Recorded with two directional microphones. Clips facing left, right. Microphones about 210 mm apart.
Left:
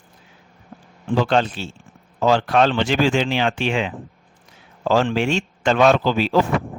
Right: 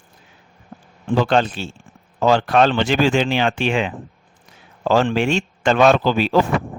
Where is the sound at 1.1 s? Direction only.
55° right (ahead or behind).